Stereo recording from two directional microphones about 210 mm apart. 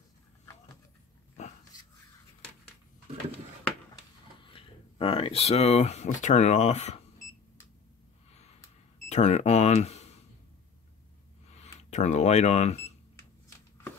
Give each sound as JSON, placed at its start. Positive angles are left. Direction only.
{"t": 4.4, "sound": "speech", "side_deg": 25}
{"t": 9.1, "sound": "speech", "side_deg": 35}
{"t": 11.5, "sound": "speech", "side_deg": 30}